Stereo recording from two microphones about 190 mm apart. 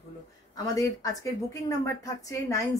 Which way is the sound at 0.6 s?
20° left (ahead or behind).